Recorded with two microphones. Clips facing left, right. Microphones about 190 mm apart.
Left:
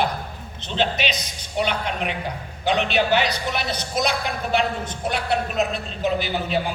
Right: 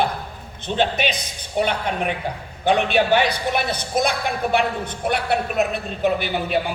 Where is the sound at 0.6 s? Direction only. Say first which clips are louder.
Right 3 dB; 50° right (ahead or behind).